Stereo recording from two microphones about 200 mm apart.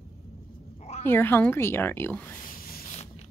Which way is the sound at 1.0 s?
10° left (ahead or behind).